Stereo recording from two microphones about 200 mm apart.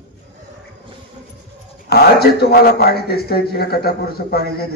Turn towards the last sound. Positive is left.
turn(degrees=50)  # may be behind; listen again after turning